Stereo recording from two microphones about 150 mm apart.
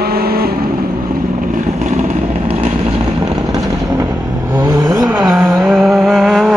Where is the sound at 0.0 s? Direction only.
90° right.